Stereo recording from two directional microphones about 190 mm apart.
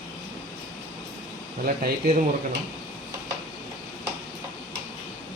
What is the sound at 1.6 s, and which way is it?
Speech, 50° right (ahead or behind).